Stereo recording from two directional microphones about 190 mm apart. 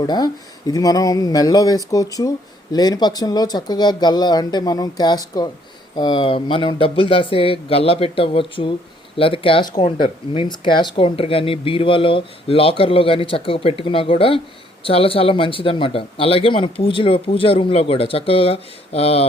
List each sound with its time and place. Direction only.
0.0 s speech: 20° left (ahead or behind)